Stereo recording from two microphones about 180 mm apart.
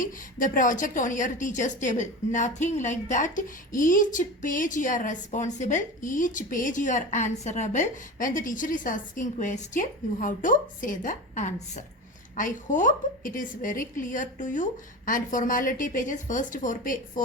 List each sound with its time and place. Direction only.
0.0 s a woman's voice: 45° left (ahead or behind)